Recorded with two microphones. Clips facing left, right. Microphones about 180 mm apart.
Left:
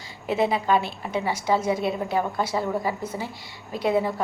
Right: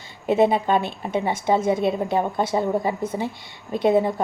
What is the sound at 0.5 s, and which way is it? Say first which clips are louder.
A woman's voice: right 2 dB; 25° right (ahead or behind).